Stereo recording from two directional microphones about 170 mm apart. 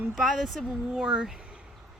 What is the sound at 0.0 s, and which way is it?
Speech, centre (ahead or behind).